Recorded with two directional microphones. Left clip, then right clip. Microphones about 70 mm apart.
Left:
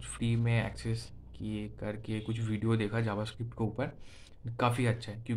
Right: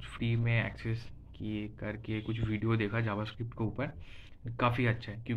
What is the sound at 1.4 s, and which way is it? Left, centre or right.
Speech, left.